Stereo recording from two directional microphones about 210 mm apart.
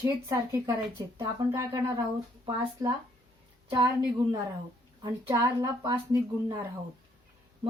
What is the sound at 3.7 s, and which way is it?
A woman's voice, 15° right (ahead or behind).